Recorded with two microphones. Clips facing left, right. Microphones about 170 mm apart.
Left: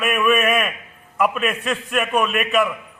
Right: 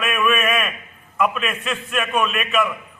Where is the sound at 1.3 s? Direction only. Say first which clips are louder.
Left 3 dB; 35° left (ahead or behind).